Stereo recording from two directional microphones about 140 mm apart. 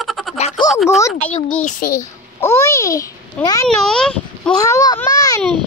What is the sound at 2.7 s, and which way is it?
Speech, 25° left (ahead or behind).